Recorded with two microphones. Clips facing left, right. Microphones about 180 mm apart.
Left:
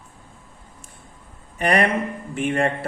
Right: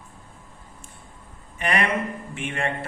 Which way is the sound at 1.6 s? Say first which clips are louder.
Left 5 dB; 40° left (ahead or behind).